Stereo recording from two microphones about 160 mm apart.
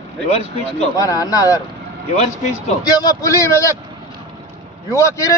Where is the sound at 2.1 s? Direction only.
45° left (ahead or behind).